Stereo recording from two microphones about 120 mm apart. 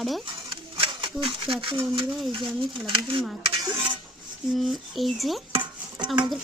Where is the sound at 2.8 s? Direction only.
45° right (ahead or behind).